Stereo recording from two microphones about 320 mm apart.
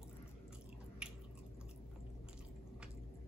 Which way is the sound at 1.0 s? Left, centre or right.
Centre.